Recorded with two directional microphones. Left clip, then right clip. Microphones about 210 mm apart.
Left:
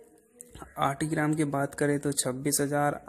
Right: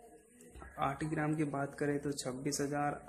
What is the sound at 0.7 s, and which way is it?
Speech, 40° left (ahead or behind).